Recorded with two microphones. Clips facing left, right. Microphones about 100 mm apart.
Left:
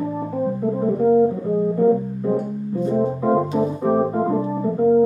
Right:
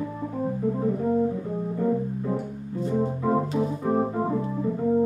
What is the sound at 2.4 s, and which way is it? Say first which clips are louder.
Organ: left 7 dB; 30° left (ahead or behind).